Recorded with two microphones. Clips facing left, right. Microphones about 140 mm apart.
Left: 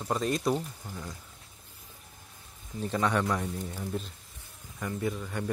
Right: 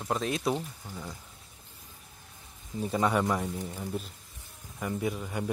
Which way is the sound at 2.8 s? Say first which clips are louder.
Right 1 dB; 10° right (ahead or behind).